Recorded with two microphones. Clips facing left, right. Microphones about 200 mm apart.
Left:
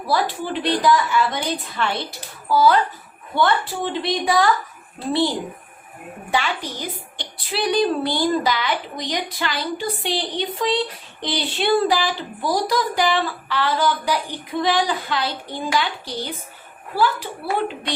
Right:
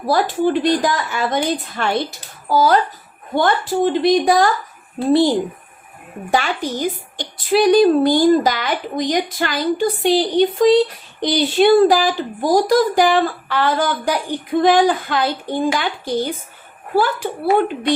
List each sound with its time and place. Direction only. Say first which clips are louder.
0.1 s speech: right 6 dB; 45° right (ahead or behind)
6.3 s speech: right 5 dB; 45° right (ahead or behind)